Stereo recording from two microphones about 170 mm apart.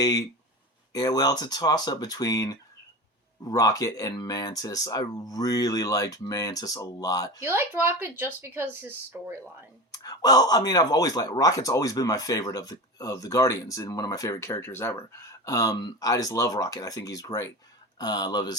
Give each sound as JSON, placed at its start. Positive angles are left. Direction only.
{"t": 0.0, "sound": "speech", "side_deg": 20}
{"t": 7.4, "sound": "speech", "side_deg": -15}
{"t": 9.9, "sound": "speech", "side_deg": 20}